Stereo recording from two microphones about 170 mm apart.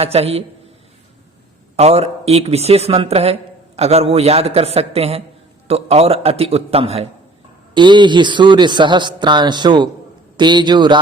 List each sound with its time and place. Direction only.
0.0 s speech: 35° right (ahead or behind)
1.7 s a man's voice: 40° right (ahead or behind)